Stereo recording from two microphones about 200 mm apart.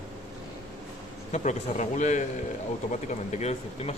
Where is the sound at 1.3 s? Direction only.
35° left (ahead or behind).